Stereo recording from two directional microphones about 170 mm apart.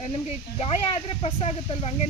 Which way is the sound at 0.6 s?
35° left (ahead or behind).